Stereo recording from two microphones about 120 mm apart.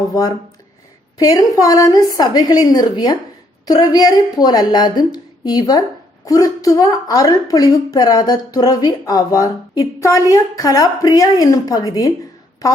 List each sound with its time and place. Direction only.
0.1 s a woman's voice: 30° left (ahead or behind)